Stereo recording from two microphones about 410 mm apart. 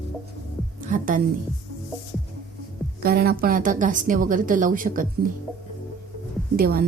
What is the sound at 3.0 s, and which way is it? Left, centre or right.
A woman's voice, right.